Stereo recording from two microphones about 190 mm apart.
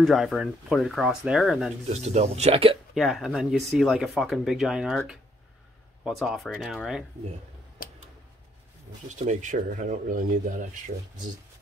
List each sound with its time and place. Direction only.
0.0 s speech: centre (ahead or behind)
1.9 s speech: 35° right (ahead or behind)
2.9 s speech: centre (ahead or behind)
9.2 s speech: 40° right (ahead or behind)